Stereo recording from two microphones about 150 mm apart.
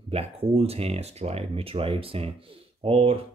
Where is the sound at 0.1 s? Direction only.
40° right (ahead or behind).